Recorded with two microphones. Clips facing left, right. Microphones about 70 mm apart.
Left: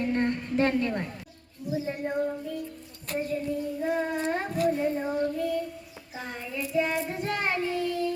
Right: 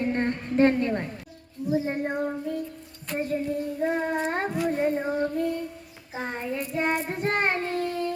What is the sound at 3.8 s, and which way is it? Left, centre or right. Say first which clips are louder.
Child singing: right 3 dB; right.